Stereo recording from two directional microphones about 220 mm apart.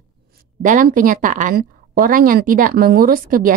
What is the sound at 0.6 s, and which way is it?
Speech, 35° right (ahead or behind).